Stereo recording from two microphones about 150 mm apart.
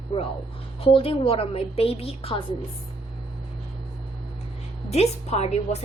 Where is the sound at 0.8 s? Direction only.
40° left (ahead or behind).